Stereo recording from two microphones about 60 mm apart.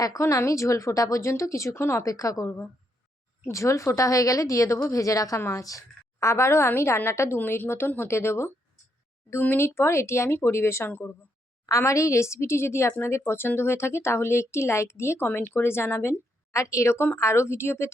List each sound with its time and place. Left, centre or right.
0.2 s a woman's voice: left
2.0 s a woman's voice: left
3.5 s a woman's voice: left
7.3 s a woman's voice: left
9.6 s speech: left
11.9 s a woman's voice: left
16.5 s a woman's voice: left